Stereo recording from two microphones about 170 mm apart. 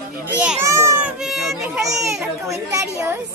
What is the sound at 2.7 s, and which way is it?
Speech, 15° right (ahead or behind).